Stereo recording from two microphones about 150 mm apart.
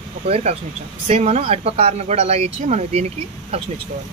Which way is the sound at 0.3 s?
50° right (ahead or behind).